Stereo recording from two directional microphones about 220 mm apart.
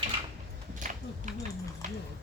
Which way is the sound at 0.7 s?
35° right (ahead or behind).